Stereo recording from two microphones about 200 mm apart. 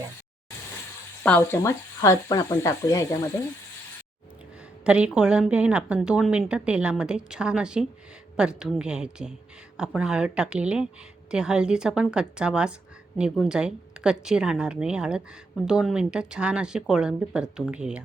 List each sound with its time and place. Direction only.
1.2 s speech: 10° left (ahead or behind)
4.9 s a woman's voice: 5° right (ahead or behind)